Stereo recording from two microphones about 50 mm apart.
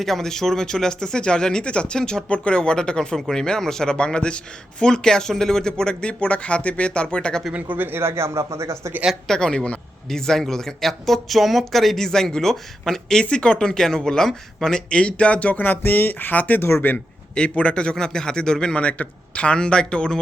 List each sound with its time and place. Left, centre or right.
0.0 s speech: centre
3.2 s a man's voice: centre
7.5 s speech: right
9.2 s speech: centre
14.8 s speech: left
17.3 s a man's voice: left